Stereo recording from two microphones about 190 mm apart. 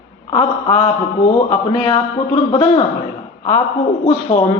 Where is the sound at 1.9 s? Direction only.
30° left (ahead or behind).